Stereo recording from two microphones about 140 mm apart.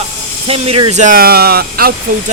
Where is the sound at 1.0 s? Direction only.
90° right.